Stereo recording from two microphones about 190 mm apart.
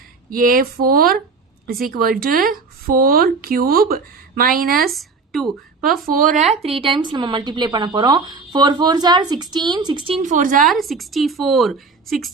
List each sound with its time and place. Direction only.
0.3 s speech: 50° right (ahead or behind)
4.9 s a sound: centre (ahead or behind)
6.1 s speech: 45° right (ahead or behind)
6.6 s speech: 30° right (ahead or behind)
10.2 s speech: 45° right (ahead or behind)
10.6 s a woman's voice: centre (ahead or behind)